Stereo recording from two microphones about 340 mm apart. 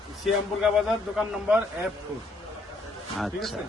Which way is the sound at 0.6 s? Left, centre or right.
Centre.